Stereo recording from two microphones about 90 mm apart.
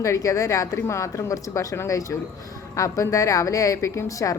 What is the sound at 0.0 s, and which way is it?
Speech, 35° left (ahead or behind).